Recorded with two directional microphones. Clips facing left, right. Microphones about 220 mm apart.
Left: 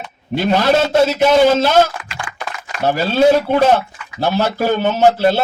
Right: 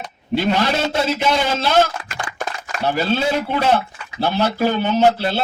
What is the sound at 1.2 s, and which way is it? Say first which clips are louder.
Speech: left 8 dB; 45° left (ahead or behind).